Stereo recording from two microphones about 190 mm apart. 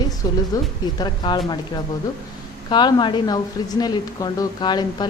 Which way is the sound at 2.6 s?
25° left (ahead or behind).